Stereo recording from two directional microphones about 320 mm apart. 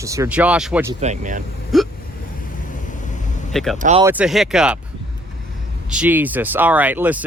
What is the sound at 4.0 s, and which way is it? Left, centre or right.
Speech, centre.